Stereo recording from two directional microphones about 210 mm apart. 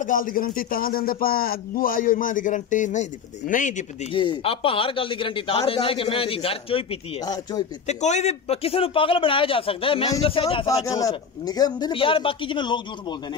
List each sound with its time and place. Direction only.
0.0 s a man's voice: 40° left (ahead or behind); by 7.6 s 20° left (ahead or behind)
7.8 s speech: 35° left (ahead or behind)